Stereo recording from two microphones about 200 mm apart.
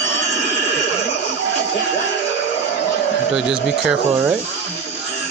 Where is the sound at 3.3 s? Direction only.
5° right (ahead or behind).